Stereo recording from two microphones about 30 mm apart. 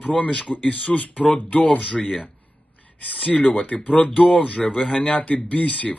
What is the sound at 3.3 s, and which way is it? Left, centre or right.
Speech, left.